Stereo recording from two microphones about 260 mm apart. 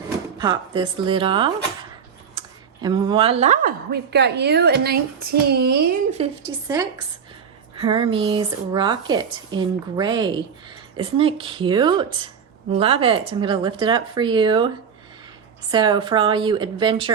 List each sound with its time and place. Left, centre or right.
0.3 s speech: centre
2.4 s a sound: centre
2.8 s a woman's voice: centre; by 5.9 s right
6.1 s a woman's voice: centre
15.7 s speech: centre